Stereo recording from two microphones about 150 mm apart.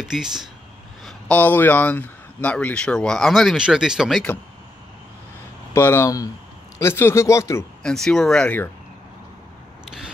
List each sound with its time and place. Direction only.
0.0 s speech: 5° right (ahead or behind)
1.0 s speech: 10° left (ahead or behind)
5.7 s speech: 15° left (ahead or behind)
7.8 s speech: 5° left (ahead or behind)